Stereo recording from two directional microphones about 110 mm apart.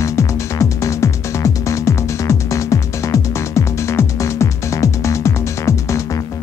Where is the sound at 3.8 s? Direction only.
25° left (ahead or behind).